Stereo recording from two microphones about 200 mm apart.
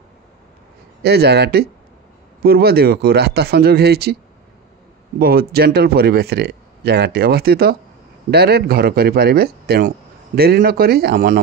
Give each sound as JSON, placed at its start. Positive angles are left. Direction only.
{"t": 1.0, "sound": "speech", "side_deg": -55}
{"t": 5.2, "sound": "speech", "side_deg": -50}